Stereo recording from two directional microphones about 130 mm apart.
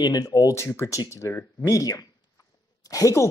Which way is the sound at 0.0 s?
30° left (ahead or behind).